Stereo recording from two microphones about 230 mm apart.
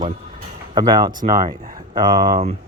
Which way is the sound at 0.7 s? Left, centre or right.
Centre.